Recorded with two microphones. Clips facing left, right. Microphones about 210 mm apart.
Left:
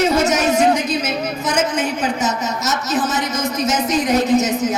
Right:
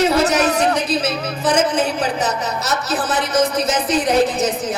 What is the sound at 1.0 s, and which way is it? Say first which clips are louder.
Music: right 1 dB; 35° right (ahead or behind).